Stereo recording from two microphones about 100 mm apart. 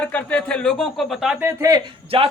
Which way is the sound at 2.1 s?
65° right (ahead or behind).